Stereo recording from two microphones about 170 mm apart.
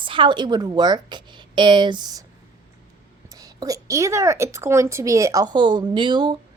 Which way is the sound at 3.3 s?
20° right (ahead or behind).